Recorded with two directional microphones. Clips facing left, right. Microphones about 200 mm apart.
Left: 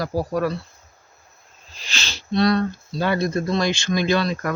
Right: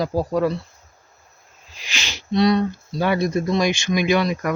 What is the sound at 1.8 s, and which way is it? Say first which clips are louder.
Speech: right 1 dB; 15° right (ahead or behind).